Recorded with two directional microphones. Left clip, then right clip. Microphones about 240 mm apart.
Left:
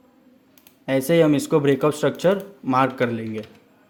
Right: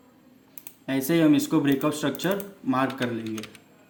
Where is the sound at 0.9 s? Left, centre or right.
Left.